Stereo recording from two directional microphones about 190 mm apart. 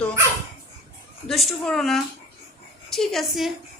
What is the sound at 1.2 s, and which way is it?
A woman's voice, centre (ahead or behind).